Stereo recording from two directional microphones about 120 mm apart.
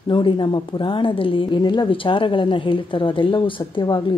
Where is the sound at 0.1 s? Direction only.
40° left (ahead or behind).